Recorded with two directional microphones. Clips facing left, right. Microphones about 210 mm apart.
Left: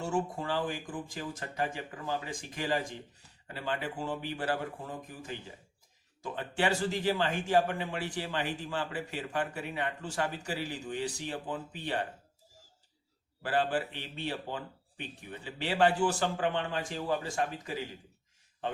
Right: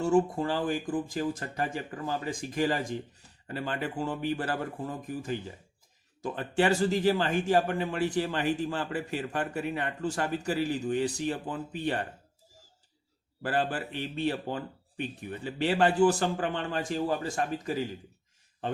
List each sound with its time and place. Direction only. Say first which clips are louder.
0.0 s a man's voice: right 8 dB; 40° right (ahead or behind)
6.6 s a man's voice: right 5 dB; 40° right (ahead or behind)
13.4 s a man's voice: even; 45° right (ahead or behind)